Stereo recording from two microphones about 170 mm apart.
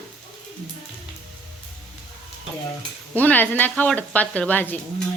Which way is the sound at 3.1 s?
10° left (ahead or behind).